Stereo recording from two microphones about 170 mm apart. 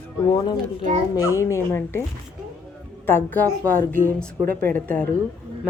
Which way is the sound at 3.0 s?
10° left (ahead or behind).